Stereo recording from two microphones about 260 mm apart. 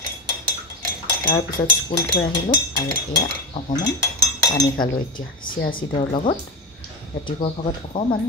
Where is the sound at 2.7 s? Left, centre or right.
Centre.